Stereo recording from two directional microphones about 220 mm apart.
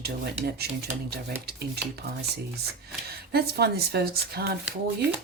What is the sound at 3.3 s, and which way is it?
Speech, 45° right (ahead or behind).